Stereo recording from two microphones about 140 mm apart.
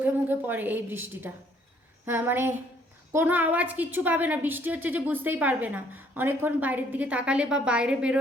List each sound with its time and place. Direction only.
0.0 s a woman's voice: 15° right (ahead or behind)